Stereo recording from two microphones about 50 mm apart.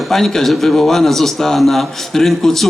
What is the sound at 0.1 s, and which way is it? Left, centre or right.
Speech, centre.